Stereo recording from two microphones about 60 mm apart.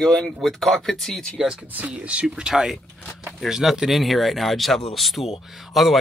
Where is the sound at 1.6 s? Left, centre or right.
Right.